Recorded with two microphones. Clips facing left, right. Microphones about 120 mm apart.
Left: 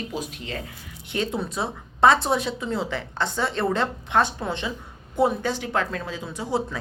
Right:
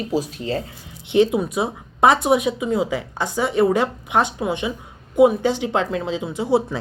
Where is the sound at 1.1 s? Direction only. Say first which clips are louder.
Right 10 dB; 20° right (ahead or behind).